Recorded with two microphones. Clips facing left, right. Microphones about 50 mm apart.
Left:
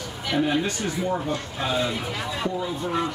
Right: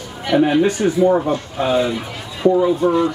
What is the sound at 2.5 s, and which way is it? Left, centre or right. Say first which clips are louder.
Speech: right 18 dB; right.